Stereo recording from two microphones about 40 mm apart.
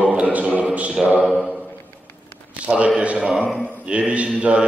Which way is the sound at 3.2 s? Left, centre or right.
Right.